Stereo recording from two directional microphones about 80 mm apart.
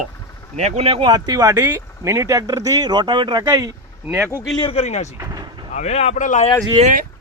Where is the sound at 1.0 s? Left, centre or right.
Right.